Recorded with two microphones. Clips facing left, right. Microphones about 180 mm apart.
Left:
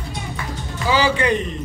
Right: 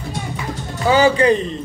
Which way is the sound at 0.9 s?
40° right (ahead or behind).